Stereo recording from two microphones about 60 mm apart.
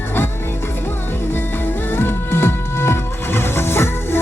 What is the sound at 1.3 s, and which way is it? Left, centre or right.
Music, left.